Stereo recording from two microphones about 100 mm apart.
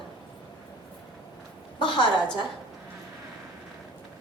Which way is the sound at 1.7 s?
50° left (ahead or behind).